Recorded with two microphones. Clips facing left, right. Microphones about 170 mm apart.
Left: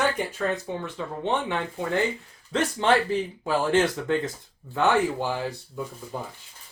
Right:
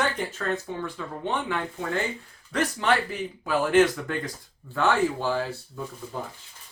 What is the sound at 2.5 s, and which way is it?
Speech, 25° left (ahead or behind).